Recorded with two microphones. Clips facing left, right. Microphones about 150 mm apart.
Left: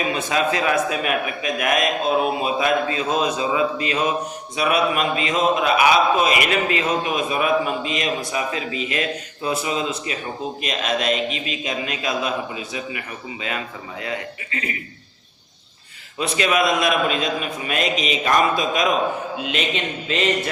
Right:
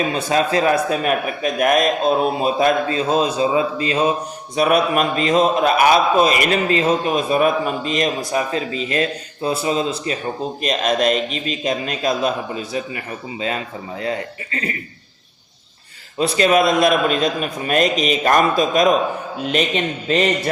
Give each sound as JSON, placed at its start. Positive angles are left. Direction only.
{"t": 0.1, "sound": "a man's voice", "side_deg": -35}
{"t": 4.5, "sound": "a man's voice", "side_deg": -45}
{"t": 14.0, "sound": "a man's voice", "side_deg": -35}
{"t": 16.1, "sound": "a man's voice", "side_deg": -35}